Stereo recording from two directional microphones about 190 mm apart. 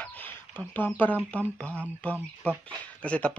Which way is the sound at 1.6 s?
5° left (ahead or behind).